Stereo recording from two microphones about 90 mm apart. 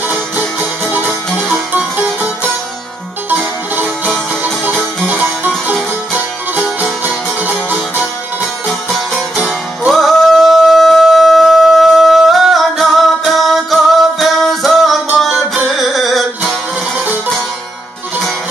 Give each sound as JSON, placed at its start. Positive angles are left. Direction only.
{"t": 0.9, "sound": "music", "side_deg": -20}
{"t": 3.3, "sound": "music", "side_deg": -20}
{"t": 9.4, "sound": "music", "side_deg": 0}